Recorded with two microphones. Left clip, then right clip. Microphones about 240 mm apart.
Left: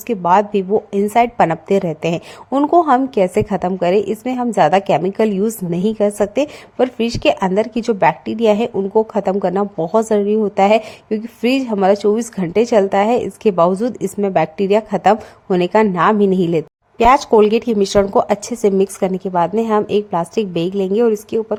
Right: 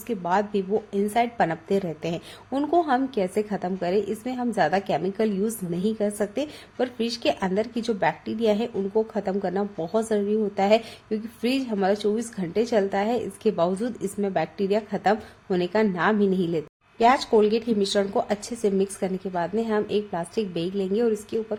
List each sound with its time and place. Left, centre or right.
0.1 s a woman's voice: left